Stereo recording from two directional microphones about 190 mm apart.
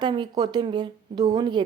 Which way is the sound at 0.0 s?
25° right (ahead or behind).